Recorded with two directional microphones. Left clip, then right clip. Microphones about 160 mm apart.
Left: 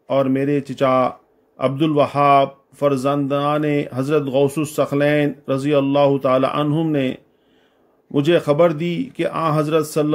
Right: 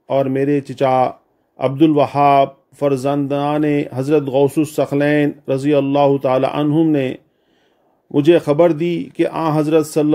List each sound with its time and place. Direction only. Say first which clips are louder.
0.1 s a man's voice: right 2 dB; 30° right (ahead or behind)